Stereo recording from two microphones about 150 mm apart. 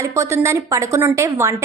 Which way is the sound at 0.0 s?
20° right (ahead or behind).